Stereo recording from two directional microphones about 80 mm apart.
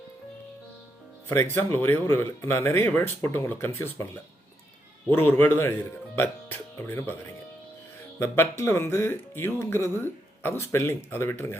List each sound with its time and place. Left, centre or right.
1.5 s speech: left
5.0 s speech: left
8.2 s speech: left